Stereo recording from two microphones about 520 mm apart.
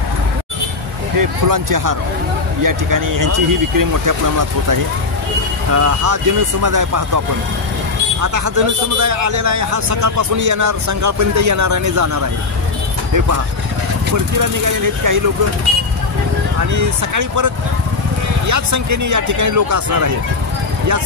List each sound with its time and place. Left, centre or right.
1.1 s a man's voice: right
8.2 s a man's voice: right
14.1 s a man's voice: right
16.7 s a man's voice: right
18.5 s a man's voice: right